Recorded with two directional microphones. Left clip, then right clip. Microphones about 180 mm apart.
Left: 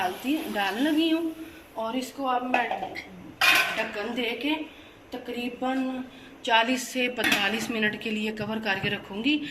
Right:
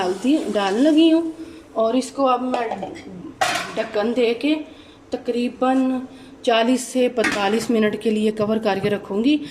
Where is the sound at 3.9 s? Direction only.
55° right (ahead or behind).